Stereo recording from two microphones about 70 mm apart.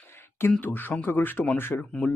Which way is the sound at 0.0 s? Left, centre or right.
Left.